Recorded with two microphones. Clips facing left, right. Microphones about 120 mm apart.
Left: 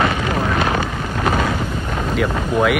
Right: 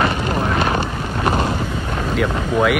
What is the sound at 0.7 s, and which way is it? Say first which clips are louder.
Vehicle: even; 25° right (ahead or behind).